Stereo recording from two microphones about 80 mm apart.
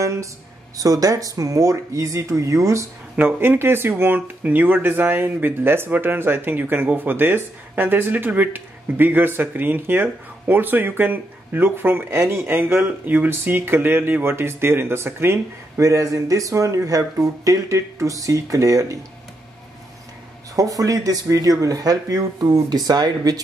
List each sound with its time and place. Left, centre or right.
0.0 s a sound: right
0.7 s speech: right
3.2 s speech: right
15.8 s speech: right
20.5 s speech: right